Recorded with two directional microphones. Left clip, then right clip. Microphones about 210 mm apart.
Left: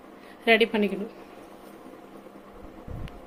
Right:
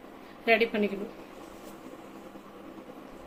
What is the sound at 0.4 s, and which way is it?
Speech, 45° left (ahead or behind).